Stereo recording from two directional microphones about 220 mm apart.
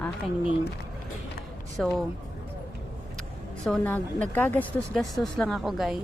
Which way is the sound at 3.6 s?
5° left (ahead or behind).